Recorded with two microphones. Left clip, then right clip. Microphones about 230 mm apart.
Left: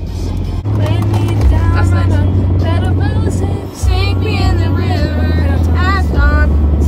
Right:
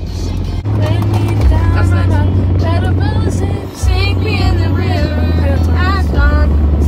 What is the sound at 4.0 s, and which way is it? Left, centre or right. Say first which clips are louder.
Music: right 1 dB; centre.